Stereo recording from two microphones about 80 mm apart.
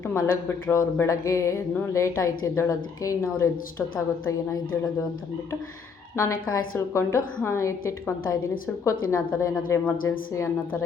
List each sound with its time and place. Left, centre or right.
0.2 s speech: left
4.3 s speech: left
6.1 s speech: left